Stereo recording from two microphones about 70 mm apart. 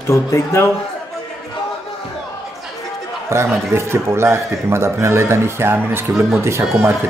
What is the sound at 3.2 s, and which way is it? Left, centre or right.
A man's voice, right.